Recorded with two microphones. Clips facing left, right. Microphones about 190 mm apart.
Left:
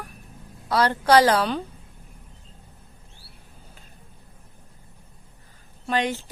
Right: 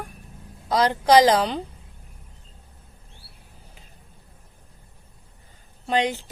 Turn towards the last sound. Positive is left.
turn(degrees=-20)  # may be behind; listen again after turning